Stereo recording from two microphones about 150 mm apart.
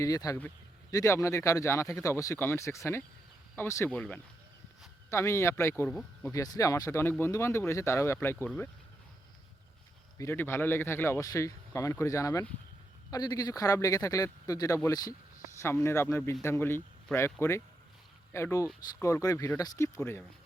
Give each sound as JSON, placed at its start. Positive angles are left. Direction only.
{"t": 0.0, "sound": "speech", "side_deg": 25}
{"t": 5.9, "sound": "speech", "side_deg": 5}
{"t": 6.3, "sound": "speech", "side_deg": 20}
{"t": 10.2, "sound": "speech", "side_deg": 15}